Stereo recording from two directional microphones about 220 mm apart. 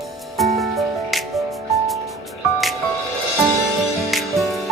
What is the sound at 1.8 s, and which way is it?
Music, centre (ahead or behind).